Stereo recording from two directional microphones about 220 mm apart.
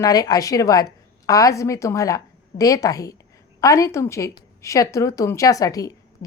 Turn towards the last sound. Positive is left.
turn(degrees=15)  # may be behind; listen again after turning